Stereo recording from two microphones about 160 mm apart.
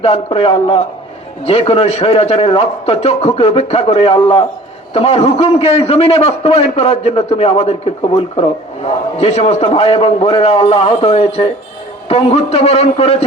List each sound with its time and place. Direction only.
0.0 s a man's voice: 35° left (ahead or behind)